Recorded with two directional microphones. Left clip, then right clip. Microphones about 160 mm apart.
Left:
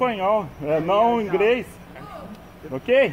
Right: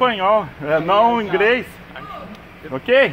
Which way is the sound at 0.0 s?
5° right (ahead or behind).